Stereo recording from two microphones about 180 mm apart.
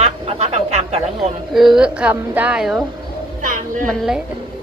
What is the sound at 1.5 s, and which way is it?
Speech, centre (ahead or behind).